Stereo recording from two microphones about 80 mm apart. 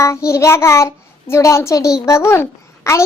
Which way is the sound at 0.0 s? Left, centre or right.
Left.